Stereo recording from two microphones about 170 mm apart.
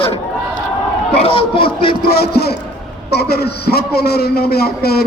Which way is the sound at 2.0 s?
70° left (ahead or behind).